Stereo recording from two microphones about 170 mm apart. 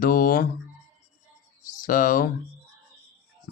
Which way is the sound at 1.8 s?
55° left (ahead or behind).